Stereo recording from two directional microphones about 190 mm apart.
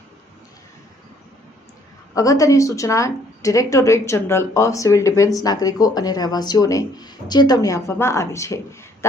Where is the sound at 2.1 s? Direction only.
20° left (ahead or behind).